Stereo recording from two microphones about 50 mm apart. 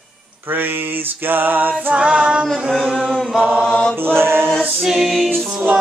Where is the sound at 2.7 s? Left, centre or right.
Centre.